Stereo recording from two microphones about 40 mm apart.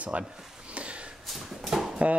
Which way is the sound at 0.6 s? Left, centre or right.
Right.